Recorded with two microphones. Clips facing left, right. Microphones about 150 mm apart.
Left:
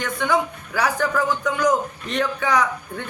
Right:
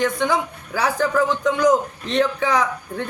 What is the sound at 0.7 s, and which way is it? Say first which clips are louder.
A man's voice: right 2 dB; 30° right (ahead or behind).